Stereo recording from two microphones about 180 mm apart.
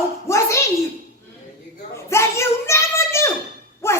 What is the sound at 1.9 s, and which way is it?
A child's voice, 15° left (ahead or behind).